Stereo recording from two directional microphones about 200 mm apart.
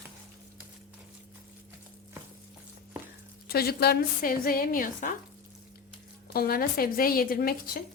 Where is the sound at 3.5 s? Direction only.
50° left (ahead or behind).